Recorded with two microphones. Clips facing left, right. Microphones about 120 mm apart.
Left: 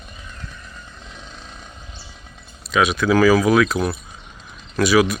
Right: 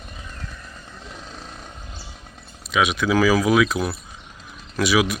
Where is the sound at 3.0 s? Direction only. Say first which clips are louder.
Left 4 dB; 10° right (ahead or behind).